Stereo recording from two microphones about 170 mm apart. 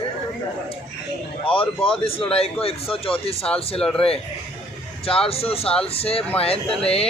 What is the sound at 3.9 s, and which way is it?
A man's voice, 35° left (ahead or behind).